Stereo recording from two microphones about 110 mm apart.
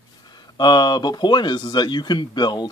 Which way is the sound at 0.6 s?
40° left (ahead or behind).